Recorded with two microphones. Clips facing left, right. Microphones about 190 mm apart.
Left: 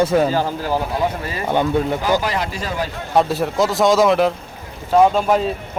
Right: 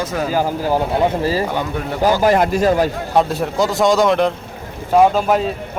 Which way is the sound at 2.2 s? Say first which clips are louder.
Right 10 dB; 50° right (ahead or behind).